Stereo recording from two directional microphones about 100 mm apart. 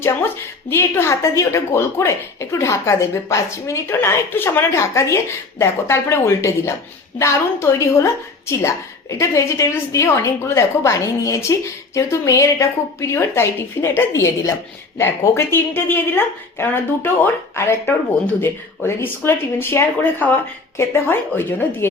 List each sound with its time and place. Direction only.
0.7 s a woman's voice: 25° left (ahead or behind)